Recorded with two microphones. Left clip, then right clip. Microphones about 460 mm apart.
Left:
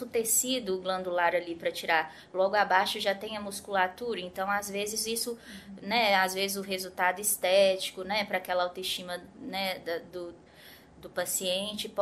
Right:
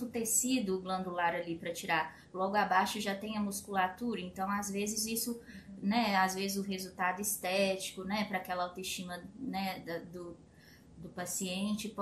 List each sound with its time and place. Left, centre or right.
0.1 s a woman's voice: left
11.1 s a woman's voice: left